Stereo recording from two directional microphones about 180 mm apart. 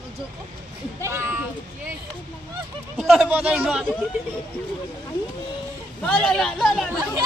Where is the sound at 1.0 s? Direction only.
15° right (ahead or behind).